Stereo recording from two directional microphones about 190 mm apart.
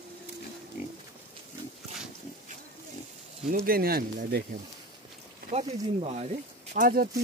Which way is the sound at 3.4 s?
45° right (ahead or behind).